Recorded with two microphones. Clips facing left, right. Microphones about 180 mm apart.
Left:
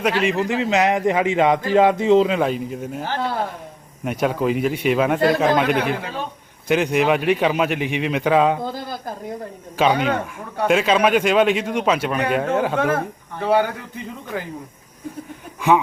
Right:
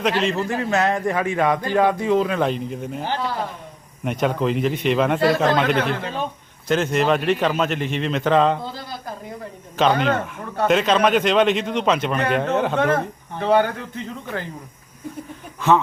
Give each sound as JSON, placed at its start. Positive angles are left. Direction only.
{"t": 0.0, "sound": "a man's voice", "side_deg": 10}
{"t": 2.4, "sound": "a man's voice", "side_deg": 5}
{"t": 9.7, "sound": "a man's voice", "side_deg": 10}